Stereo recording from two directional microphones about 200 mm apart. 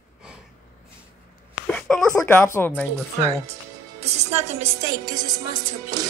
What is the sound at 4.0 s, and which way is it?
Music, 35° right (ahead or behind).